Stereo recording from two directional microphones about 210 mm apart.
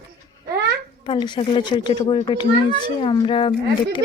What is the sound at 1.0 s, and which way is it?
Speech, 20° left (ahead or behind).